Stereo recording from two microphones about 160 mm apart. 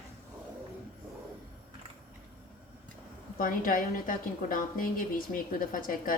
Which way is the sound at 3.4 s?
60° left (ahead or behind).